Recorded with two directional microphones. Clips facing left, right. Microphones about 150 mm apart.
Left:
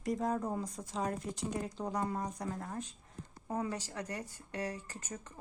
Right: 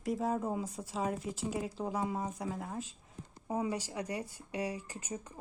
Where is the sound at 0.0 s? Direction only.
5° right (ahead or behind).